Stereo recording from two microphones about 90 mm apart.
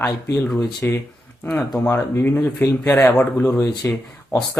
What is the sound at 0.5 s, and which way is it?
Speech, 10° left (ahead or behind).